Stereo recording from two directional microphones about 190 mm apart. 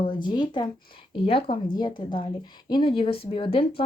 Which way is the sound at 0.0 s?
25° left (ahead or behind).